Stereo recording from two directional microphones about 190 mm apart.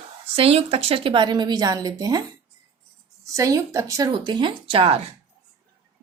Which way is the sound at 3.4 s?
15° right (ahead or behind).